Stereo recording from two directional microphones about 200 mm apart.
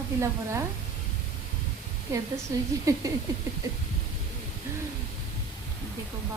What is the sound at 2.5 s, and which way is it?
Speech, 15° right (ahead or behind).